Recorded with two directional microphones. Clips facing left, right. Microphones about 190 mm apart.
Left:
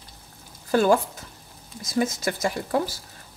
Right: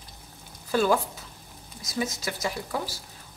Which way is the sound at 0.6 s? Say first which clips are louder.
Left 4 dB; 50° left (ahead or behind).